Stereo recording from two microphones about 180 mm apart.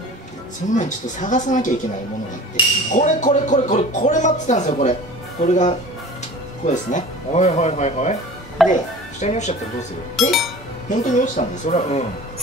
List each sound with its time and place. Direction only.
0.7 s speech: 45° left (ahead or behind)
2.9 s speech: 40° left (ahead or behind)
8.6 s speech: centre (ahead or behind)
9.2 s speech: 40° left (ahead or behind)
10.2 s speech: centre (ahead or behind)
10.9 s speech: 45° left (ahead or behind)